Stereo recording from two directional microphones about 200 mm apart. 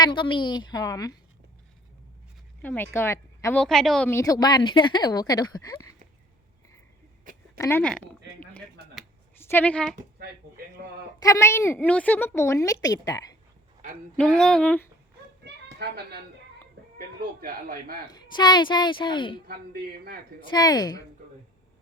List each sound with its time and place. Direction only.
0.0 s speech: 25° left (ahead or behind)
2.6 s a woman's voice: 10° left (ahead or behind)
4.1 s speech: 15° left (ahead or behind)
7.6 s a woman's voice: 10° left (ahead or behind)
9.3 s a woman's voice: 10° left (ahead or behind)
11.2 s a woman's voice: 15° left (ahead or behind)
14.2 s speech: 5° left (ahead or behind)
15.8 s a man's voice: 50° right (ahead or behind)
17.4 s a man's voice: 45° right (ahead or behind)
18.1 s speech: 20° left (ahead or behind)
19.5 s a man's voice: 50° right (ahead or behind)
20.5 s speech: 20° left (ahead or behind)